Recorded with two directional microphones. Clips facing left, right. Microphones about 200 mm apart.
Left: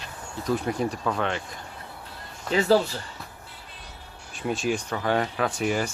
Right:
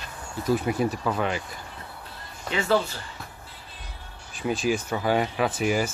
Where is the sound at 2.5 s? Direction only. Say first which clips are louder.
Left 3 dB; 35° left (ahead or behind).